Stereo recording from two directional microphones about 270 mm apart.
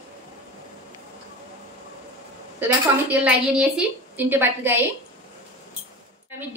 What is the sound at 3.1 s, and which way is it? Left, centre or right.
A woman's voice, centre.